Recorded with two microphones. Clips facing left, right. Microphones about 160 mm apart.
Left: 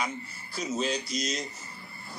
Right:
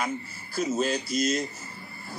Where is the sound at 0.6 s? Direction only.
50° right (ahead or behind).